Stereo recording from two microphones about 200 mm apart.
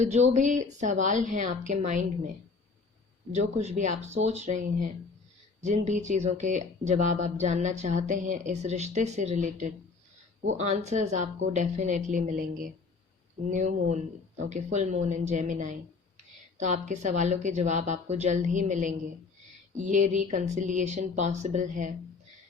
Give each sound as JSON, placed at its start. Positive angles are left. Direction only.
{"t": 0.0, "sound": "speech", "side_deg": -35}
{"t": 3.3, "sound": "speech", "side_deg": -35}